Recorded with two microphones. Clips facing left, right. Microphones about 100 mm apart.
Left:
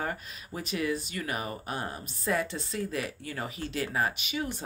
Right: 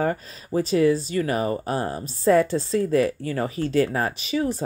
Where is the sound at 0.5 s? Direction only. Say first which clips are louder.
Right 12 dB; 35° right (ahead or behind).